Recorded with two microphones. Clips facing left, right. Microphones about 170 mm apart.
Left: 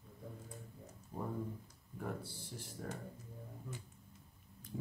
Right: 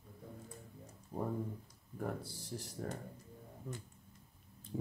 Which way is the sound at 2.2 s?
40° right (ahead or behind).